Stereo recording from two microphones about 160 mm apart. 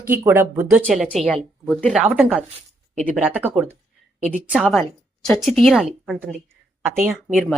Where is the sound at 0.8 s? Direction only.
Centre (ahead or behind).